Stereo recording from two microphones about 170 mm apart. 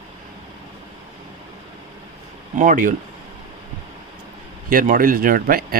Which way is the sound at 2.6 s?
50° right (ahead or behind).